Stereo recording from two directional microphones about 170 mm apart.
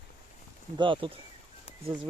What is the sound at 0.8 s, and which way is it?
Speech, 30° right (ahead or behind).